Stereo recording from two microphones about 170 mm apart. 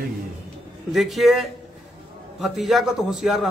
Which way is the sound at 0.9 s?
Centre (ahead or behind).